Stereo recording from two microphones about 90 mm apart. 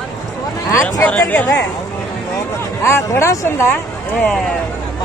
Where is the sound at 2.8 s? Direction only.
30° left (ahead or behind).